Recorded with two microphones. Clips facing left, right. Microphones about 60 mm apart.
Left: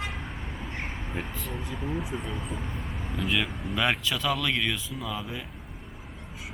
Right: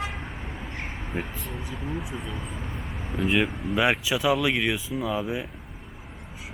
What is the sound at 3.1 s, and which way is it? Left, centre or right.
Speech, centre.